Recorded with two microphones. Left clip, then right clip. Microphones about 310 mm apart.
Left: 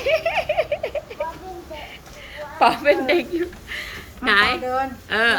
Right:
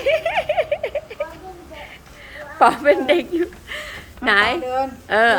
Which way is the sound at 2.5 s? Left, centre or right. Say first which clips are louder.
Right 2 dB; centre.